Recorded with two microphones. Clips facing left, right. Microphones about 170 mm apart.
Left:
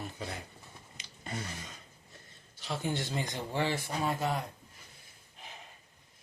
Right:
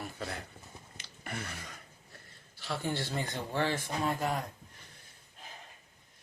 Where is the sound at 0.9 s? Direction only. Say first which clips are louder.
Left 1 dB; 15° left (ahead or behind).